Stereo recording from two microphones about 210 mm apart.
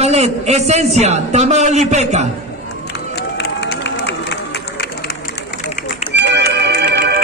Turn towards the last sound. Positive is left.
turn(degrees=-55)  # may be behind; listen again after turning